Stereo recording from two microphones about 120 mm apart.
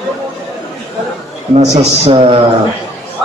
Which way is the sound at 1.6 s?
55° right (ahead or behind).